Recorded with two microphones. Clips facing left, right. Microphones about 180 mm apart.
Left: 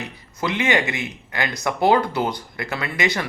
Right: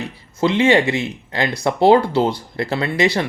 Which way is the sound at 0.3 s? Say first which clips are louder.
Right 7 dB; 30° right (ahead or behind).